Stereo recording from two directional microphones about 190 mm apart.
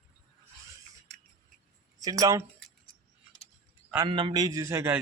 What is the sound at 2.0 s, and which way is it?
Speech, 20° right (ahead or behind).